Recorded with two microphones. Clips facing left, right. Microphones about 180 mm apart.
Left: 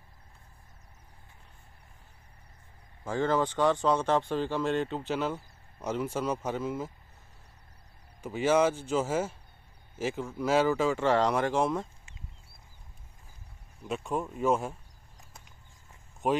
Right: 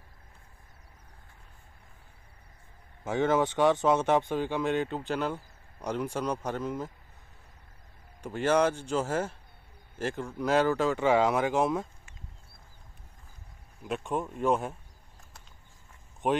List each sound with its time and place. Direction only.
3.3 s speech: 20° right (ahead or behind)
4.6 s speech: centre (ahead or behind)
8.2 s speech: 5° left (ahead or behind)
13.8 s speech: centre (ahead or behind)
16.2 s speech: centre (ahead or behind)